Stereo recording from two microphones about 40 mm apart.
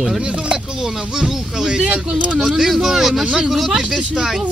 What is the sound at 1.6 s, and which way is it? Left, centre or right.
Speech, right.